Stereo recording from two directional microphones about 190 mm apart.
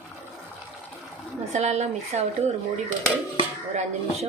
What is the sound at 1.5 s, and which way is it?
Speech, 35° right (ahead or behind).